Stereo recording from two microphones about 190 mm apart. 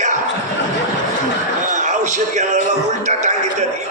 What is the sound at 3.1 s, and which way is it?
Speech, 40° right (ahead or behind).